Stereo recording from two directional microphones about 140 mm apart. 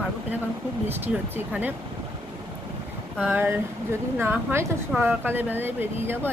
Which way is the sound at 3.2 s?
10° right (ahead or behind).